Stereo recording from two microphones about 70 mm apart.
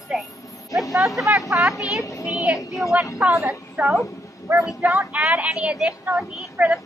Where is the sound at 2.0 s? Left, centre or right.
Left.